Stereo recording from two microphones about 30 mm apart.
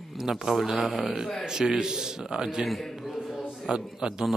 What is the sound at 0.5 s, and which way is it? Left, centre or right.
Speech, centre.